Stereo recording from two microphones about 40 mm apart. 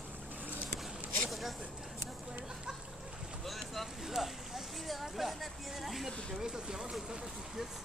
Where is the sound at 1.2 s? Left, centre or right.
Centre.